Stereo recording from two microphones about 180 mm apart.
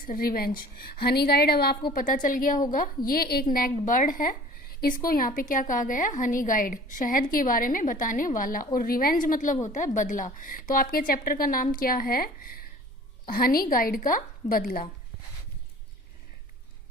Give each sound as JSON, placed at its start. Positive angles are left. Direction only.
{"t": 0.0, "sound": "speech", "side_deg": 50}
{"t": 1.9, "sound": "a woman's voice", "side_deg": 50}